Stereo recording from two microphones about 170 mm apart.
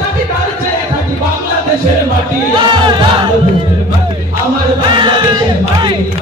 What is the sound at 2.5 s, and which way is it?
Music, 25° right (ahead or behind).